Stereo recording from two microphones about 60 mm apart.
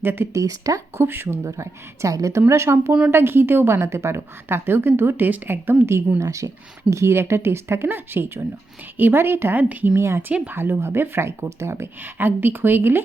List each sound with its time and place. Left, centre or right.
0.0 s a woman's voice: right
0.3 s speech: right
0.9 s a woman's voice: right
1.5 s a woman's voice: right
2.5 s a woman's voice: right
6.1 s a woman's voice: right
6.9 s a woman's voice: right
10.0 s speech: right
10.5 s a woman's voice: right
12.0 s a woman's voice: right